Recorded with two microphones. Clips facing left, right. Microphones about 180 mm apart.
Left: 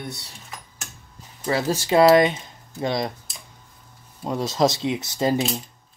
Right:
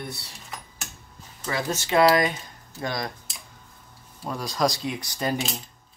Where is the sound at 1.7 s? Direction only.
30° left (ahead or behind).